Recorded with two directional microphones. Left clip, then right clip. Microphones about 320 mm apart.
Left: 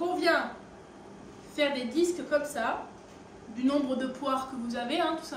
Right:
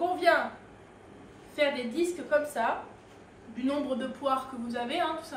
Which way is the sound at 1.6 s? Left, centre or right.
Centre.